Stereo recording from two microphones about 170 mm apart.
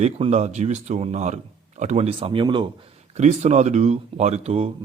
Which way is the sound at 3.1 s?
40° right (ahead or behind).